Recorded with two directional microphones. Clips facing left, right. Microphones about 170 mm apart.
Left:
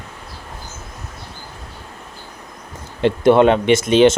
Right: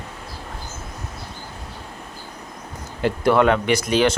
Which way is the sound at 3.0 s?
20° left (ahead or behind).